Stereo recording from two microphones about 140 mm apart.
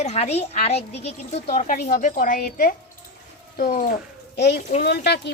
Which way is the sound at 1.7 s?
75° left (ahead or behind).